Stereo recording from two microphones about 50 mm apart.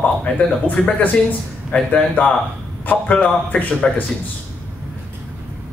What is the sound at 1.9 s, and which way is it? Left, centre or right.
A man's voice, left.